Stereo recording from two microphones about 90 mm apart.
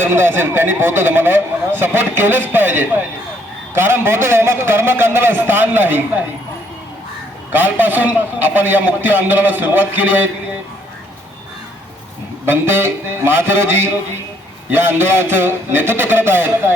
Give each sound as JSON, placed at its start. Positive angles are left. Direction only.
{"t": 0.0, "sound": "a man's voice", "side_deg": -25}
{"t": 7.5, "sound": "a man's voice", "side_deg": -20}
{"t": 12.5, "sound": "a man's voice", "side_deg": -25}